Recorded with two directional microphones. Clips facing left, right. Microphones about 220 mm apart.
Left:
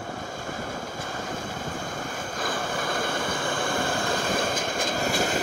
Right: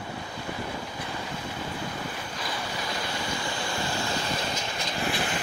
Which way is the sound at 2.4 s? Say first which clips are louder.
Left 5 dB; 50° left (ahead or behind).